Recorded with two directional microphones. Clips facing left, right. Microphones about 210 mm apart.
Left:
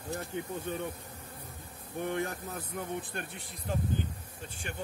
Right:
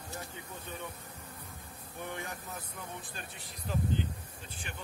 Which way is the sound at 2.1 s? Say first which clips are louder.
Left 8 dB; 60° left (ahead or behind).